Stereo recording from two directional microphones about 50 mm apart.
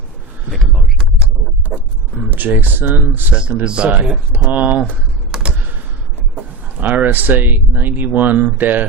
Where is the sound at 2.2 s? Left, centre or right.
Right.